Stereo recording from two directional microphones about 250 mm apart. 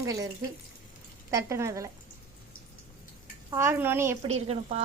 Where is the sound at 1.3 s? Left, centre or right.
Centre.